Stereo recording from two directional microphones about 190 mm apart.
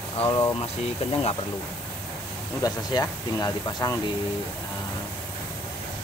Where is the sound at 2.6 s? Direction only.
20° left (ahead or behind).